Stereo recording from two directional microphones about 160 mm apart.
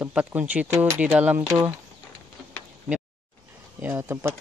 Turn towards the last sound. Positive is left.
turn(degrees=-15)  # may be behind; listen again after turning